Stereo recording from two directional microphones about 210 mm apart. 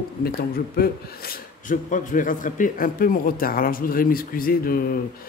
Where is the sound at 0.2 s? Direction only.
45° left (ahead or behind).